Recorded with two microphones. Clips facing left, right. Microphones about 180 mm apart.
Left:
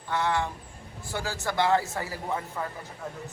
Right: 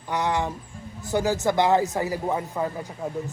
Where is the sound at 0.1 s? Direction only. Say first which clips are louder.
Right 2 dB; 15° right (ahead or behind).